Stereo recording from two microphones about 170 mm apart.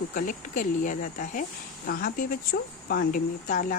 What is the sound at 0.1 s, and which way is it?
Speech, 50° left (ahead or behind).